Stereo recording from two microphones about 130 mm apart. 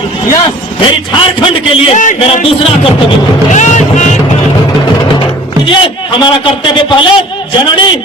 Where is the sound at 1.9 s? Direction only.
70° left (ahead or behind).